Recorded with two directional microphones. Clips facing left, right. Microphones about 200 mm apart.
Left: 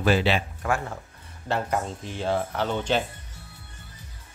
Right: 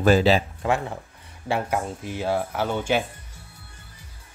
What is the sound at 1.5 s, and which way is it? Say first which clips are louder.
Speech: right 1 dB; 10° right (ahead or behind).